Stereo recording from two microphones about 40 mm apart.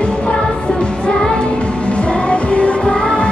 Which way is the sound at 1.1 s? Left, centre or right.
Left.